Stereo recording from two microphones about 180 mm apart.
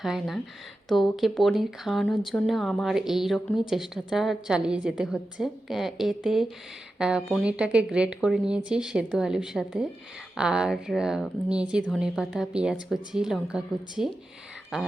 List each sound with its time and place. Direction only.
0.0 s speech: centre (ahead or behind)